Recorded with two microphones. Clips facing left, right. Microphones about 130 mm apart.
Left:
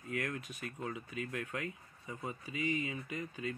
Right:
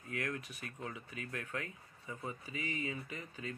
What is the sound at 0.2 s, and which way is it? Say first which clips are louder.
Speech: left 1 dB; 20° left (ahead or behind).